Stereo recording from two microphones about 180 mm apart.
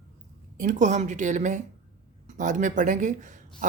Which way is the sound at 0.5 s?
45° right (ahead or behind).